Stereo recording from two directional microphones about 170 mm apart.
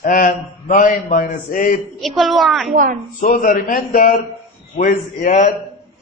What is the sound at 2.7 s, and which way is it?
Speech, 50° right (ahead or behind).